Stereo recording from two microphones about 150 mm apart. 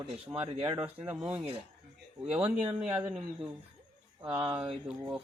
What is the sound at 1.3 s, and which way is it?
Speech, 40° right (ahead or behind).